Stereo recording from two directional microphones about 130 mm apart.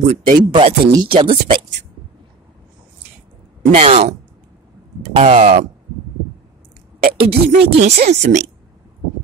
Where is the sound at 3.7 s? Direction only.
60° right (ahead or behind).